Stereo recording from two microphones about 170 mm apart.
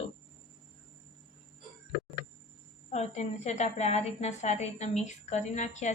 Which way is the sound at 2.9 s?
40° left (ahead or behind).